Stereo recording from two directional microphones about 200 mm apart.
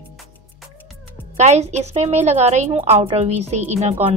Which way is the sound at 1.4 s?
35° right (ahead or behind).